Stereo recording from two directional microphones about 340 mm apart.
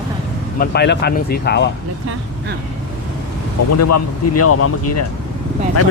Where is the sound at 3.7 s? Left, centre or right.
Left.